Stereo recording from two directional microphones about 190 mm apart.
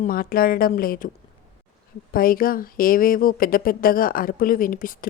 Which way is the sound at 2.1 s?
50° left (ahead or behind).